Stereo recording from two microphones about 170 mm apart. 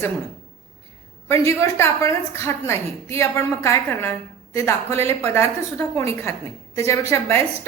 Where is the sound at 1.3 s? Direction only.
15° left (ahead or behind).